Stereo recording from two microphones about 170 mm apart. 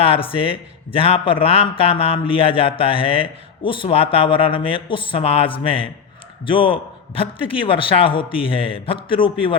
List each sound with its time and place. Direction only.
0.0 s a man's voice: 30° left (ahead or behind)